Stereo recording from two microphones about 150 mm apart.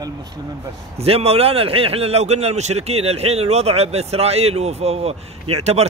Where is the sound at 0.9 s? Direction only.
40° right (ahead or behind).